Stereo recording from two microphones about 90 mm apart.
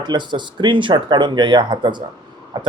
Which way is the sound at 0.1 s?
55° right (ahead or behind).